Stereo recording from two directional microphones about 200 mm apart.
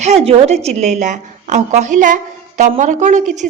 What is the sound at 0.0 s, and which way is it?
A woman's voice, 30° right (ahead or behind).